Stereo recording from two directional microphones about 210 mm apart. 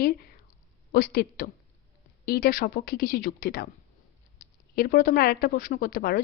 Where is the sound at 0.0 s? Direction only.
45° left (ahead or behind).